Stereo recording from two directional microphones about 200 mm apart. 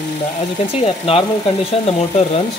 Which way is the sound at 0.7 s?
30° left (ahead or behind).